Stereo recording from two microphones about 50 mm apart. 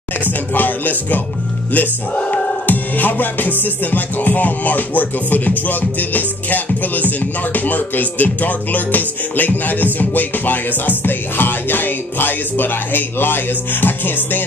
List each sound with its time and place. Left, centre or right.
0.6 s music: left